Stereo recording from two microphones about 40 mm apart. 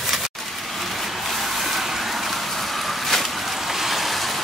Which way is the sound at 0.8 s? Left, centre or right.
Centre.